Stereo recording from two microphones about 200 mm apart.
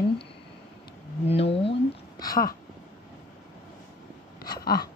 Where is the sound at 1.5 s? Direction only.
25° left (ahead or behind).